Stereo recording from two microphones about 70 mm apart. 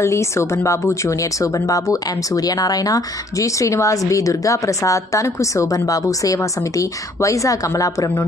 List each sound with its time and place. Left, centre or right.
0.0 s speech: left